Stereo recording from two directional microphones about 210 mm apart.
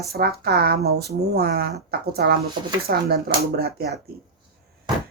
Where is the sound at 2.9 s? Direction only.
45° right (ahead or behind).